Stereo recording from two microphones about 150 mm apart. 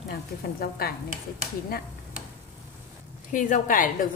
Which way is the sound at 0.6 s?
85° left.